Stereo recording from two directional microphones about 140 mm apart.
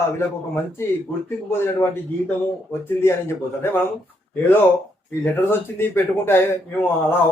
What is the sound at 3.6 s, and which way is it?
A man's voice, 15° left (ahead or behind).